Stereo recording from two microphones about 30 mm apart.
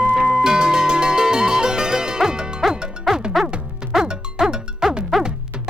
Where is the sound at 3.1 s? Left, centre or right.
Centre.